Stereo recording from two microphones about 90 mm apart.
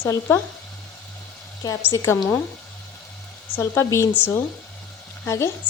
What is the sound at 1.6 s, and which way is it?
Speech, 40° left (ahead or behind).